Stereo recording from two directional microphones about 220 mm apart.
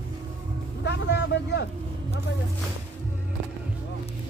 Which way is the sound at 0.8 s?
50° left (ahead or behind).